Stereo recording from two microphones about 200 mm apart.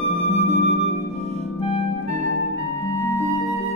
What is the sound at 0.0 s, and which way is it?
Music, 30° left (ahead or behind).